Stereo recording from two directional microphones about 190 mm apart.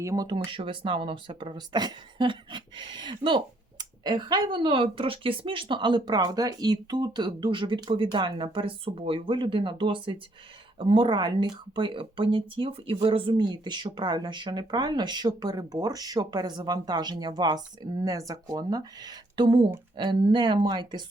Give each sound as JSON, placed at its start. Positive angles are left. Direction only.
{"t": 0.0, "sound": "speech", "side_deg": -15}